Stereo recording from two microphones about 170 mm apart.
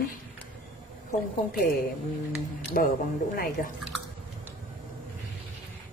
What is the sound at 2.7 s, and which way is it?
Speech, 60° left (ahead or behind).